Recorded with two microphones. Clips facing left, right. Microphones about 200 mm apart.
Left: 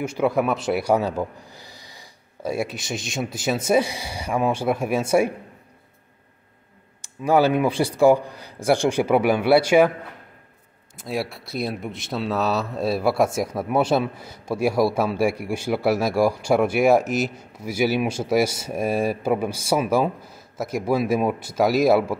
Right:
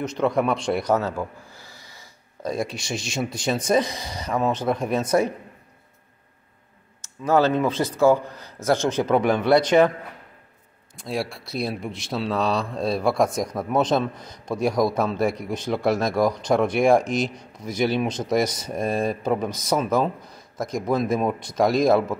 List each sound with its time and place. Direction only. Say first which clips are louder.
0.0 s speech: left 1 dB; 10° left (ahead or behind)
7.0 s speech: left 1 dB; 15° left (ahead or behind)
11.0 s speech: left 1 dB; centre (ahead or behind)